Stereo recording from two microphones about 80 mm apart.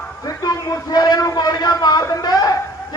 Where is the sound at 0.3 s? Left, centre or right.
Left.